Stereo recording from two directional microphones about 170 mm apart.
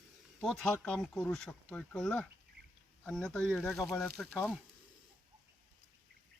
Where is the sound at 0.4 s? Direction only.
5° left (ahead or behind).